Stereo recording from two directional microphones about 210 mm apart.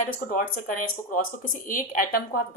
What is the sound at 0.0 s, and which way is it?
A woman's voice, 40° left (ahead or behind).